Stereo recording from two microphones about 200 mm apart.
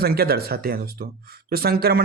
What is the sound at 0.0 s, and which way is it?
Speech, 50° right (ahead or behind).